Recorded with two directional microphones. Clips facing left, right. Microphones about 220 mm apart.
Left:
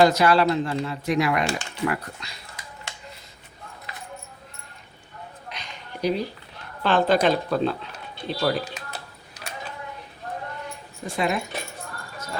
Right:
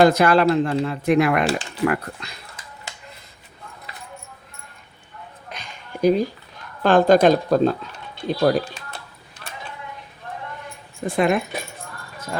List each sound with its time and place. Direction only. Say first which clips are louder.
0.0 s speech: right 3 dB; 55° right (ahead or behind)
5.5 s a sound: right 4 dB; 50° right (ahead or behind)
6.8 s a woman's voice: right 6 dB; 45° right (ahead or behind)
11.0 s a woman's voice: right 6 dB; 55° right (ahead or behind)